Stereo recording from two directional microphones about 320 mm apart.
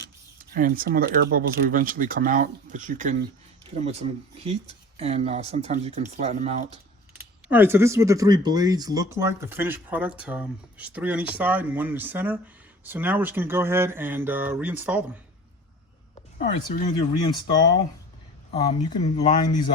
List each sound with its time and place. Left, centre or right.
0.5 s speech: right
7.4 s speech: centre
16.4 s speech: left
18.5 s speech: centre